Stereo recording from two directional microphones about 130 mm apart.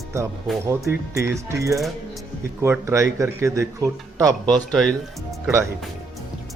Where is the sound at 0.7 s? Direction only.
25° right (ahead or behind).